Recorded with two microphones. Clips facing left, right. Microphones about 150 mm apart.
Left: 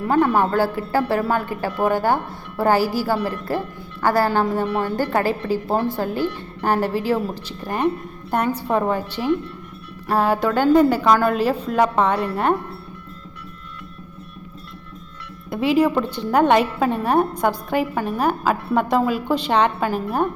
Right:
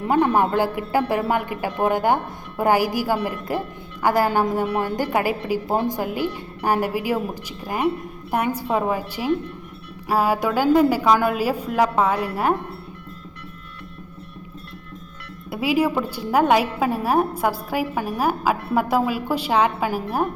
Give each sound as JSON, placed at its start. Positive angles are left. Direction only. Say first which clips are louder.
{"t": 0.0, "sound": "a woman's voice", "louder": "left 1 dB", "side_deg": -20}
{"t": 15.4, "sound": "a woman's voice", "louder": "left 3 dB", "side_deg": -5}